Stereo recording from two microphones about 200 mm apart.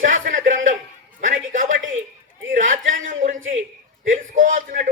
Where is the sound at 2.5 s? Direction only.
40° right (ahead or behind).